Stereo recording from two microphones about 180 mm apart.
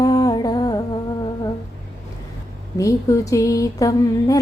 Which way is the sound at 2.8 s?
15° left (ahead or behind).